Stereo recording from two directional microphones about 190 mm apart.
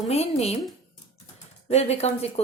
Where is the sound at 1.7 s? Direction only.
35° left (ahead or behind).